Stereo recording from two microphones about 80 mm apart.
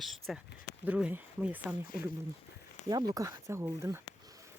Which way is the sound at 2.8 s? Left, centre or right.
Right.